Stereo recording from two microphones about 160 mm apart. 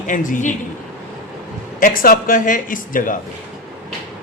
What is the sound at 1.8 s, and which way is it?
Speech, 60° left (ahead or behind).